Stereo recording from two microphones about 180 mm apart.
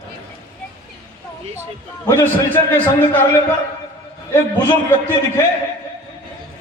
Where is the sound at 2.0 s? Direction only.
15° left (ahead or behind).